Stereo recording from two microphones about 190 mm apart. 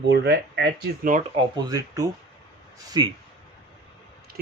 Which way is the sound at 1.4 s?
20° right (ahead or behind).